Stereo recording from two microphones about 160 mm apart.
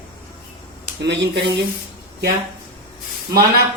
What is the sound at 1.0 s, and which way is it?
Speech, 90° right.